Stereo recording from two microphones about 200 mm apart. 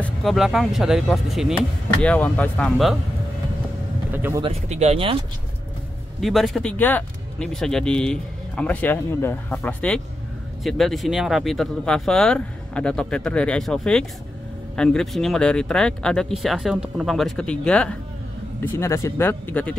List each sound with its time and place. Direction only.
0.0 s speech: centre (ahead or behind)
4.1 s speech: 10° right (ahead or behind)
4.4 s speech: 30° right (ahead or behind)
6.2 s speech: centre (ahead or behind)